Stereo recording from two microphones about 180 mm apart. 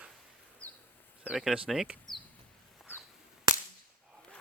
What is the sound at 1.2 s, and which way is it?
Speech, 5° right (ahead or behind).